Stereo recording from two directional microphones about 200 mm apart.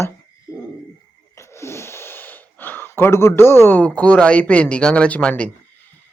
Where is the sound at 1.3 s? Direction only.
15° left (ahead or behind).